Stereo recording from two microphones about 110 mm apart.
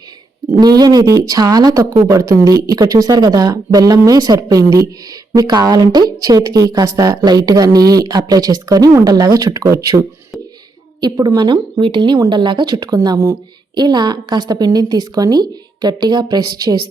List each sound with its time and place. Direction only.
0.6 s speech: 35° right (ahead or behind)
11.3 s speech: 45° right (ahead or behind)
12.7 s speech: 35° right (ahead or behind)